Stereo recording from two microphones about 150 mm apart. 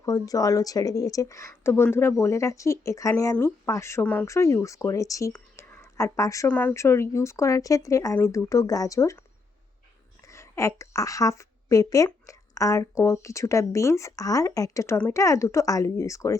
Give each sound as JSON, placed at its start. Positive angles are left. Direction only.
{"t": 0.0, "sound": "speech", "side_deg": 20}
{"t": 10.2, "sound": "a woman's voice", "side_deg": 20}